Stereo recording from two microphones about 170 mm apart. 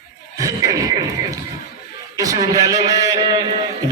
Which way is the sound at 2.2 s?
20° right (ahead or behind).